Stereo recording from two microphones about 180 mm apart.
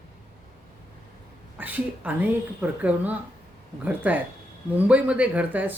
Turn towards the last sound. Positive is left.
turn(degrees=-10)  # may be behind; listen again after turning